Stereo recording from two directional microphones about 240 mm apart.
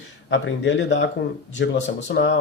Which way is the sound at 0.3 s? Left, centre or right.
Left.